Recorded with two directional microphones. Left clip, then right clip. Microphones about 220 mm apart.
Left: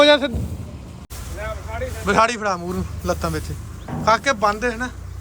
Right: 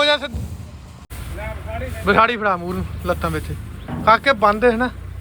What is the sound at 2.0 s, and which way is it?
A man's voice, 15° left (ahead or behind).